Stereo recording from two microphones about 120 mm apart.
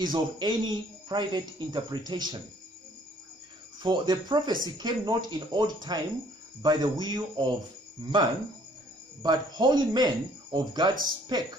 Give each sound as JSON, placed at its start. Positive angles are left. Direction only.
{"t": 0.0, "sound": "speech", "side_deg": -35}
{"t": 3.8, "sound": "speech", "side_deg": -40}
{"t": 9.2, "sound": "speech", "side_deg": -35}